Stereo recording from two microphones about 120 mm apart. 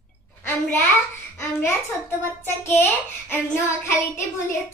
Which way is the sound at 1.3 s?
20° left (ahead or behind).